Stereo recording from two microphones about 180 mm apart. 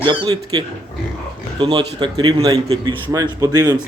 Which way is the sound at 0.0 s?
25° right (ahead or behind).